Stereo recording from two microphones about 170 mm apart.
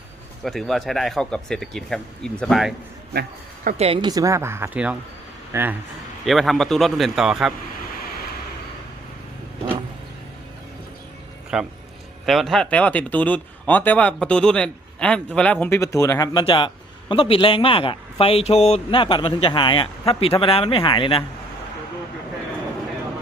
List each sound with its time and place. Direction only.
0.4 s speech: centre (ahead or behind)
3.1 s a man's voice: 60° right (ahead or behind)
3.8 s a woman's voice: 35° right (ahead or behind); by 5.7 s 15° right (ahead or behind)
6.2 s speech: centre (ahead or behind)
11.5 s a man's voice: 5° right (ahead or behind)
15.6 s a man's voice: 15° left (ahead or behind)